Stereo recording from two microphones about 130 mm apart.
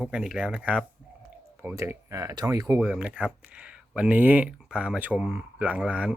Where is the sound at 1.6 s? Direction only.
20° right (ahead or behind).